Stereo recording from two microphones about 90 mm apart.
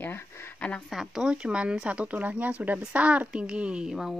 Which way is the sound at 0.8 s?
5° right (ahead or behind).